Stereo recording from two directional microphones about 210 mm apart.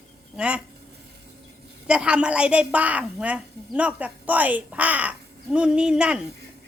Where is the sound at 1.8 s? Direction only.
5° right (ahead or behind).